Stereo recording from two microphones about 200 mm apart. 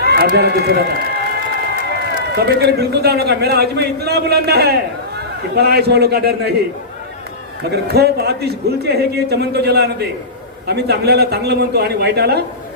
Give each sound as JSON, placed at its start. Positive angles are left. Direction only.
{"t": 0.0, "sound": "a sound", "side_deg": -55}
{"t": 0.3, "sound": "a man's voice", "side_deg": -50}
{"t": 2.3, "sound": "a man's voice", "side_deg": -55}
{"t": 7.6, "sound": "a man's voice", "side_deg": -55}